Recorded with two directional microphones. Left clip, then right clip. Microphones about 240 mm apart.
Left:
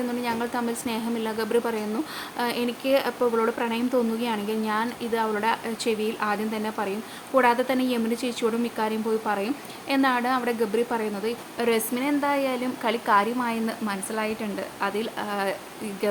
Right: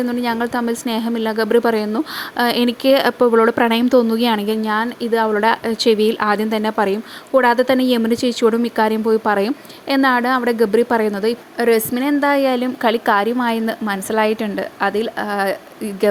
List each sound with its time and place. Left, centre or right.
0.2 s a woman's voice: right